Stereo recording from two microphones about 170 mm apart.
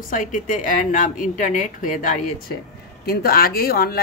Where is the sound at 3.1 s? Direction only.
65° left (ahead or behind).